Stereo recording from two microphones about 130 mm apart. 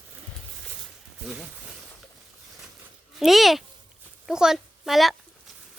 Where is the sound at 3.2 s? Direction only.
Centre (ahead or behind).